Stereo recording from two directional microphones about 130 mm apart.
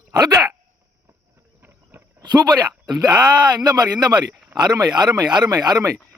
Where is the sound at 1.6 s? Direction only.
15° right (ahead or behind).